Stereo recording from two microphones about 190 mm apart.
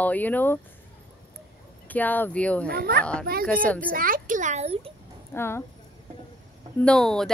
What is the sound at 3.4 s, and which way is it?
Speech, 5° left (ahead or behind).